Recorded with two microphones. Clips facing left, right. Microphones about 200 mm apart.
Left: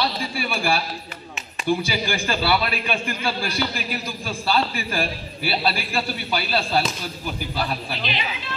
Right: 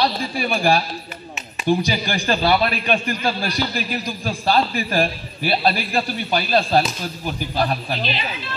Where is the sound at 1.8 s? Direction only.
40° right (ahead or behind).